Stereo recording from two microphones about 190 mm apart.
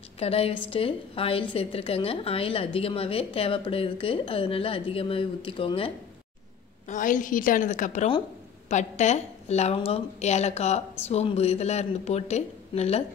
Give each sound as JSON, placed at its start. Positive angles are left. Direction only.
{"t": 0.2, "sound": "a woman's voice", "side_deg": 30}
{"t": 6.9, "sound": "a woman's voice", "side_deg": 45}